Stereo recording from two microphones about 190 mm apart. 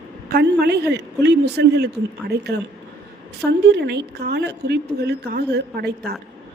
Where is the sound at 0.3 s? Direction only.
55° right (ahead or behind).